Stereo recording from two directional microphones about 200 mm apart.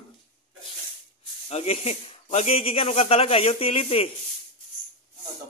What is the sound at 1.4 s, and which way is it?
Speech, 30° left (ahead or behind).